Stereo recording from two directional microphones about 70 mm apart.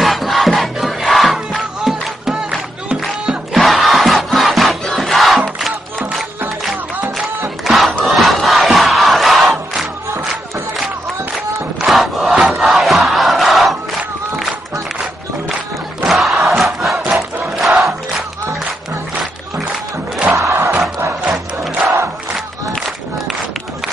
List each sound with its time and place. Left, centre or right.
0.0 s crowd: centre
5.6 s music: centre
7.6 s crowd: centre
11.8 s crowd: centre
16.0 s crowd: centre
20.3 s crowd: right
21.3 s music: centre